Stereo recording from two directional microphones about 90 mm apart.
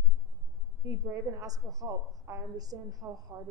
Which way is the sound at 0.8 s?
35° right (ahead or behind).